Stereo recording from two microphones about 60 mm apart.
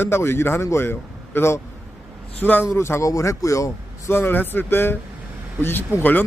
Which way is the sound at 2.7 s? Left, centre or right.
Left.